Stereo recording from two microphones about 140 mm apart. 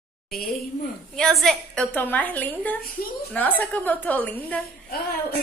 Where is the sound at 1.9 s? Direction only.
10° left (ahead or behind).